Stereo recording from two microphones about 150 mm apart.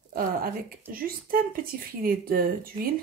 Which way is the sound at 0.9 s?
75° right (ahead or behind).